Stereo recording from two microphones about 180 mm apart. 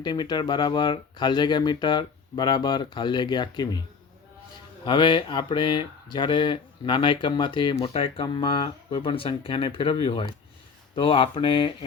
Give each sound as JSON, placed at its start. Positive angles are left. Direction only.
{"t": 0.0, "sound": "speech", "side_deg": 25}
{"t": 4.9, "sound": "speech", "side_deg": 25}